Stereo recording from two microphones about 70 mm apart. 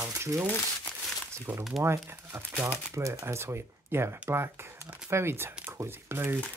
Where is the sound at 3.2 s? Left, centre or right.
Right.